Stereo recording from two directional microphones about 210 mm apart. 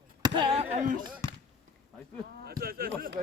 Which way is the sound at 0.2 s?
25° right (ahead or behind).